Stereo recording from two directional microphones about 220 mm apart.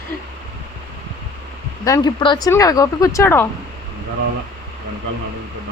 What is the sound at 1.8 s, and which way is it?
Speech, 15° left (ahead or behind).